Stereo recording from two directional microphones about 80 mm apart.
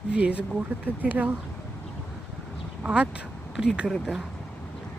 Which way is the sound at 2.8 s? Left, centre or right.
Centre.